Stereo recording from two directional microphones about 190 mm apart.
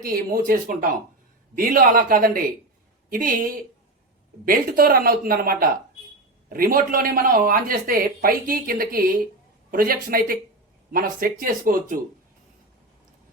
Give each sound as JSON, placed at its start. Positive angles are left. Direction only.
{"t": 0.0, "sound": "speech", "side_deg": -50}